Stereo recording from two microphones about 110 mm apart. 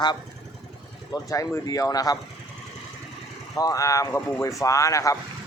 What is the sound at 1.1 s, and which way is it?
Speech, 30° left (ahead or behind).